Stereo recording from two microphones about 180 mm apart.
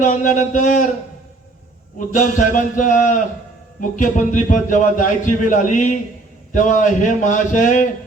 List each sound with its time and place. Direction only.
0.0 s a man's voice: 45° left (ahead or behind)
2.4 s a man's voice: 45° left (ahead or behind)